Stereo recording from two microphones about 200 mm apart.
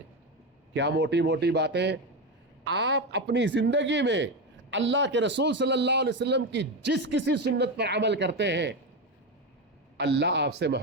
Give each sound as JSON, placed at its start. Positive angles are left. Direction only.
{"t": 0.7, "sound": "a man's voice", "side_deg": -60}
{"t": 10.0, "sound": "a man's voice", "side_deg": -60}